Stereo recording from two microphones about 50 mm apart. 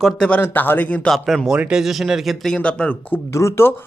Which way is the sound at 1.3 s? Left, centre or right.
Centre.